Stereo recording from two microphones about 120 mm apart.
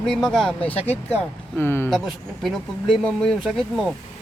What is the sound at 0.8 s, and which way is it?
Speech, 60° left (ahead or behind).